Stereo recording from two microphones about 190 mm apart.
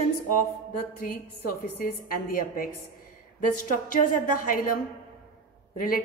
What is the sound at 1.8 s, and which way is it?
Speech, 50° left (ahead or behind).